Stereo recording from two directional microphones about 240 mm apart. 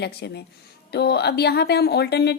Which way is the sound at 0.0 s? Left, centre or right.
Left.